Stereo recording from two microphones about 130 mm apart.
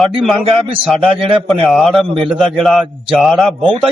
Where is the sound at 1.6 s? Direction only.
Centre (ahead or behind).